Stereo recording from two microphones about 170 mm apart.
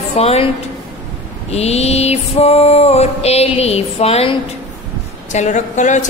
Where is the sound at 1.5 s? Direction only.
40° left (ahead or behind).